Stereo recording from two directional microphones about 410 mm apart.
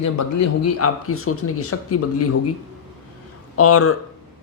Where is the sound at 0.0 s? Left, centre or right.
Left.